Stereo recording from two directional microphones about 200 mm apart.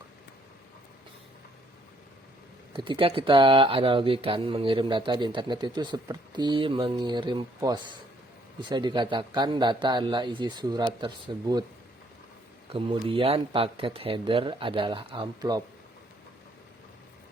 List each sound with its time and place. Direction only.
2.7 s speech: 25° right (ahead or behind)
12.7 s speech: 25° right (ahead or behind)